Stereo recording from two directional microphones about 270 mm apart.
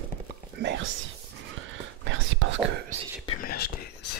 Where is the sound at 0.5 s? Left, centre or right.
Right.